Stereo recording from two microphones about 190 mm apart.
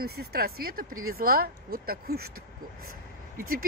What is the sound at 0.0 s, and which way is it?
Speech, 55° right (ahead or behind).